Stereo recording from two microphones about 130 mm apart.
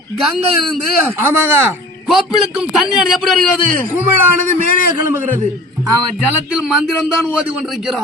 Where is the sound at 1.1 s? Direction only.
15° right (ahead or behind).